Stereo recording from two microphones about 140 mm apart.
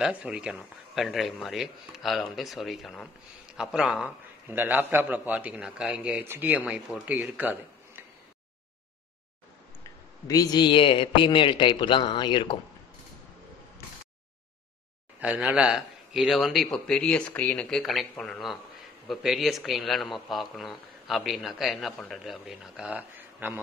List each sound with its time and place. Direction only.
0.0 s a man's voice: 10° right (ahead or behind)
10.2 s a man's voice: 25° left (ahead or behind)
15.1 s a man's voice: 10° right (ahead or behind)